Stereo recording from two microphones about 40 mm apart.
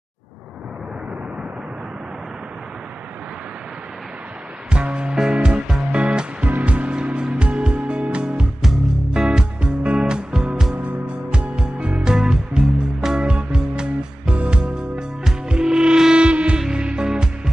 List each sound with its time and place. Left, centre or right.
4.6 s music: right